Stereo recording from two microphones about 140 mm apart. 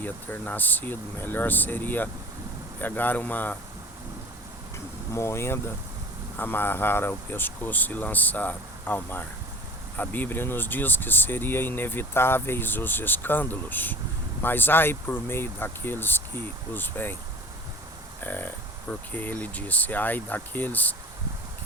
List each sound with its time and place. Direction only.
0.0 s speech: 15° left (ahead or behind)
5.1 s speech: 20° left (ahead or behind)
18.2 s speech: 15° left (ahead or behind)